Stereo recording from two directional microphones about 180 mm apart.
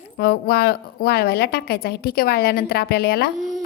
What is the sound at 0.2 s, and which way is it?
A woman's voice, 60° left (ahead or behind).